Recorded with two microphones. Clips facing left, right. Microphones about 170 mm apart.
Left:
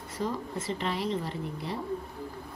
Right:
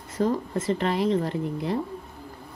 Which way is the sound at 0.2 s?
50° right (ahead or behind).